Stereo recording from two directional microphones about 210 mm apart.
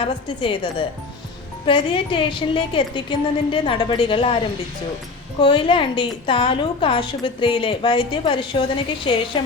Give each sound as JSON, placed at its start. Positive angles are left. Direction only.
{"t": 0.0, "sound": "a woman's voice", "side_deg": 25}
{"t": 5.4, "sound": "a woman's voice", "side_deg": 25}